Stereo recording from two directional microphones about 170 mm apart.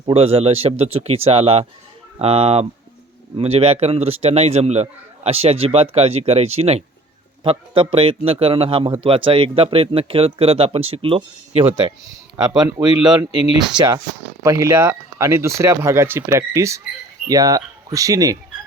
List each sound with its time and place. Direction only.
0.0 s a man's voice: 35° right (ahead or behind)